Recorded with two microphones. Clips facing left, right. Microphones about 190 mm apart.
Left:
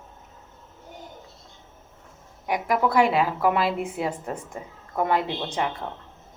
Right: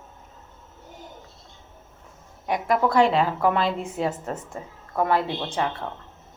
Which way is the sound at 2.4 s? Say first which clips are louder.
Right 1 dB; 10° left (ahead or behind).